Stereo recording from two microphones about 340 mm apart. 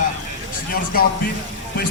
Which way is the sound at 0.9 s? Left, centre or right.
Left.